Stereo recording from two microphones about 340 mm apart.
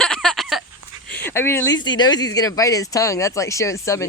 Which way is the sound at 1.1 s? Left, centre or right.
Centre.